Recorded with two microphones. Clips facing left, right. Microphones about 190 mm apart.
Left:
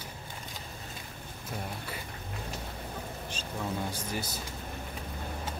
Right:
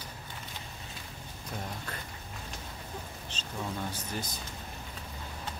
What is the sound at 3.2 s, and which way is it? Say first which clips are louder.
Speech: left 2 dB; 10° left (ahead or behind).